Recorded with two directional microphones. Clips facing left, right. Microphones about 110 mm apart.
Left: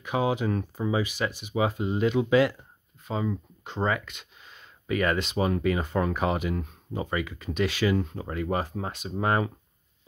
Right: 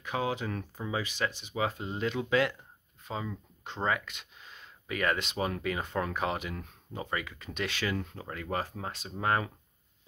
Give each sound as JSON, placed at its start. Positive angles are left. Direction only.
{"t": 0.0, "sound": "speech", "side_deg": 15}
{"t": 6.5, "sound": "speech", "side_deg": 15}
{"t": 7.0, "sound": "speech", "side_deg": 5}
{"t": 8.0, "sound": "speech", "side_deg": 20}